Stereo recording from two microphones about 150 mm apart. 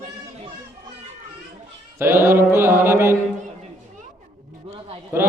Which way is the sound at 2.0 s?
15° right (ahead or behind).